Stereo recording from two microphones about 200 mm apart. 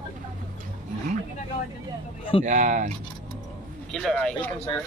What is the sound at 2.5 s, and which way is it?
Speech, 40° right (ahead or behind).